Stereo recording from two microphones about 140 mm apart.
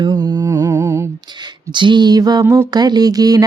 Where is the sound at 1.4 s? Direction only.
35° right (ahead or behind).